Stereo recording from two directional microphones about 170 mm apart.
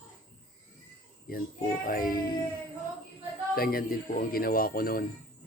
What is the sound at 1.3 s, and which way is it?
A child's voice, 60° left (ahead or behind).